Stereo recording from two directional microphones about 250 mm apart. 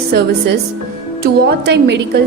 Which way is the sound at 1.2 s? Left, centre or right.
Right.